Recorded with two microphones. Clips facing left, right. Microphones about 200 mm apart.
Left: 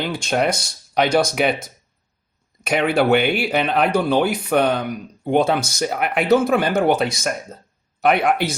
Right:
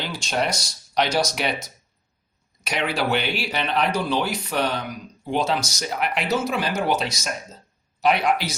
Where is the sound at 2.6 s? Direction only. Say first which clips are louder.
Left 7 dB; 55° left (ahead or behind).